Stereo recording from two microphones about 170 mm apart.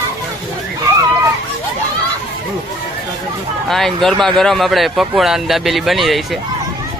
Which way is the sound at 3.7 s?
Centre (ahead or behind).